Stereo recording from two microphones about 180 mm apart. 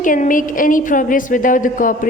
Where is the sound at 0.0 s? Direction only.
50° left (ahead or behind).